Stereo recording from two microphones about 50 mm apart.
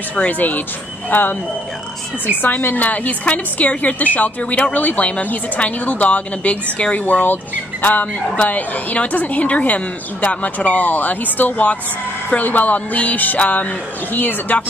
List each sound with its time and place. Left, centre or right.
0.1 s a woman's voice: left
2.4 s a woman's voice: left